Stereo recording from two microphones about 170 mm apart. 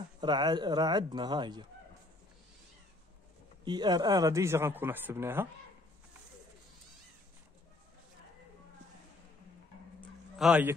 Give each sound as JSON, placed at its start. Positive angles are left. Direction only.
{"t": 0.2, "sound": "speech", "side_deg": -25}
{"t": 3.6, "sound": "speech", "side_deg": -25}
{"t": 10.3, "sound": "a man's voice", "side_deg": -5}